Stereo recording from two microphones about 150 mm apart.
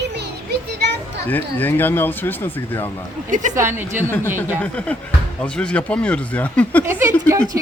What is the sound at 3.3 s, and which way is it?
Speech, 55° right (ahead or behind).